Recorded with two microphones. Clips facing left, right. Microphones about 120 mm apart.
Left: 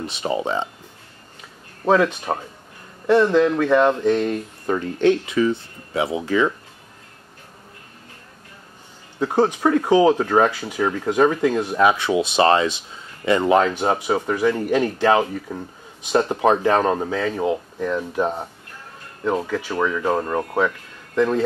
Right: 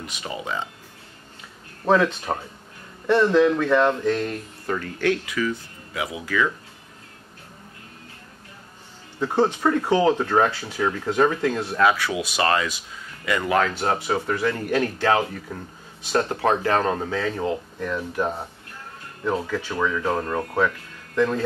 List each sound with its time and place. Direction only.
0.0 s speech: 30° left (ahead or behind)
1.9 s speech: 10° left (ahead or behind); by 6.5 s 25° left (ahead or behind)
9.2 s speech: 10° left (ahead or behind)